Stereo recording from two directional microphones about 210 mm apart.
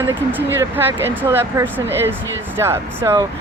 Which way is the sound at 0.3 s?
10° right (ahead or behind).